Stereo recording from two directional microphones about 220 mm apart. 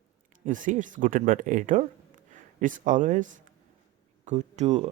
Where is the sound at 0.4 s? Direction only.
35° right (ahead or behind).